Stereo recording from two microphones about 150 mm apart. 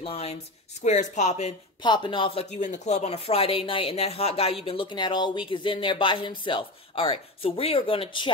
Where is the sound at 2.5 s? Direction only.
55° left (ahead or behind); by 8.3 s 35° left (ahead or behind).